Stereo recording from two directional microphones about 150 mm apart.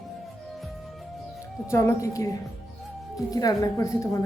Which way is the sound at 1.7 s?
20° left (ahead or behind).